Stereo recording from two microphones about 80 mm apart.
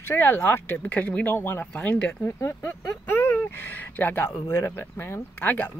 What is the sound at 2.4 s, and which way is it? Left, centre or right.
Speech, left.